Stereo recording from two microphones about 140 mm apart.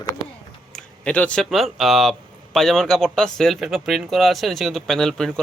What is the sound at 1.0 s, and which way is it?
Speech, 10° left (ahead or behind).